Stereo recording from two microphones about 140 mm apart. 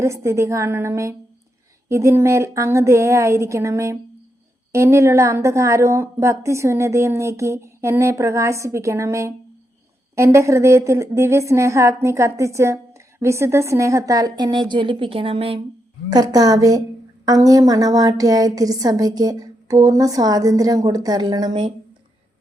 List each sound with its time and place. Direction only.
0.0 s a woman's voice: 20° right (ahead or behind); by 15.6 s 40° right (ahead or behind)
16.0 s a woman's voice: 30° right (ahead or behind)